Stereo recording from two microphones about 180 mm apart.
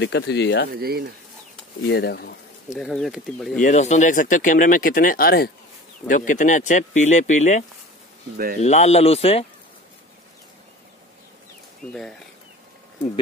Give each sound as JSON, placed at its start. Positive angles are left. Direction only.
{"t": 0.0, "sound": "speech", "side_deg": 70}
{"t": 0.7, "sound": "speech", "side_deg": -60}
{"t": 1.9, "sound": "speech", "side_deg": 65}
{"t": 2.7, "sound": "speech", "side_deg": 0}
{"t": 3.6, "sound": "speech", "side_deg": 40}
{"t": 6.0, "sound": "speech", "side_deg": 45}
{"t": 11.9, "sound": "speech", "side_deg": 5}